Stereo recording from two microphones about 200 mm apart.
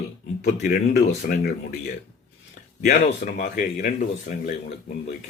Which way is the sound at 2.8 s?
45° left (ahead or behind).